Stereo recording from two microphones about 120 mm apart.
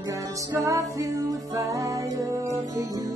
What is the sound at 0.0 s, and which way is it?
Music, 25° right (ahead or behind).